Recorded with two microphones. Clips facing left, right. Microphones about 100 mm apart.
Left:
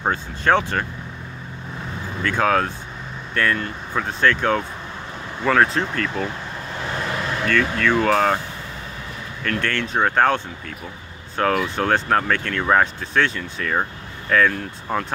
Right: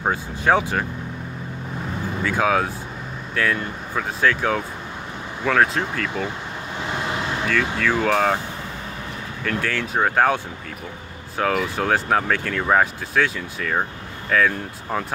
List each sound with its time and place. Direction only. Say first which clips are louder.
0.0 s speech: even; 10° right (ahead or behind)
2.2 s speech: left 1 dB; 5° right (ahead or behind)
7.4 s speech: left 3 dB; 5° right (ahead or behind)
9.4 s speech: left 1 dB; 5° right (ahead or behind)